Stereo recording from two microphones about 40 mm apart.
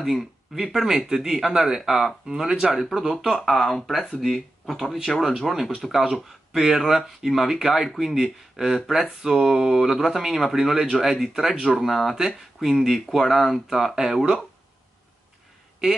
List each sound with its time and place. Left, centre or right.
0.0 s speech: centre
3.9 s speech: centre
4.2 s speech: centre